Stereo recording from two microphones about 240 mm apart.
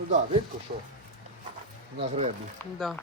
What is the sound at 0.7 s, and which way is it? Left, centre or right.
Speech, right.